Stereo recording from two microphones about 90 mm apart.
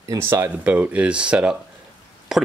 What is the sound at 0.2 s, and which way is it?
Speech, 25° right (ahead or behind).